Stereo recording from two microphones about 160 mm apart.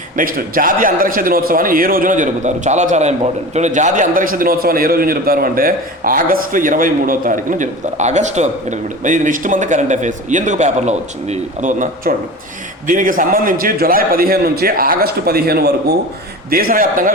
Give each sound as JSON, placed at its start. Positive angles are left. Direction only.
{"t": 0.2, "sound": "a man's voice", "side_deg": -60}
{"t": 16.5, "sound": "a man's voice", "side_deg": -65}